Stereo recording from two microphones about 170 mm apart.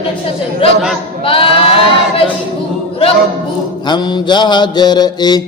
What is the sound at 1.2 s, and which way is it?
Sheep, 30° left (ahead or behind).